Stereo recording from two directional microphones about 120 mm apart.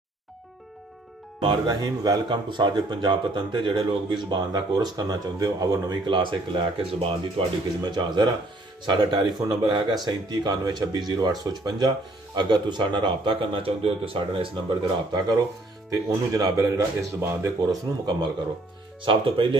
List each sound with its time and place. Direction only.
1.4 s speech: 40° right (ahead or behind)
7.8 s speech: 35° right (ahead or behind)
15.9 s speech: 30° right (ahead or behind)
17.6 s speech: 35° right (ahead or behind)